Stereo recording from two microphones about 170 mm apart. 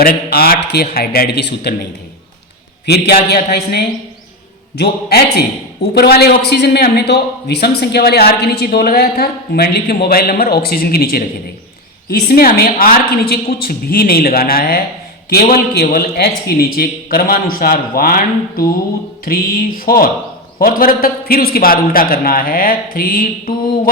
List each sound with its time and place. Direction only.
0.0 s a man's voice: 60° left (ahead or behind)